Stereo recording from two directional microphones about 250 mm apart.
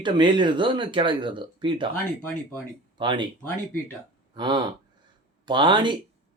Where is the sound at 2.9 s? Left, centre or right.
Centre.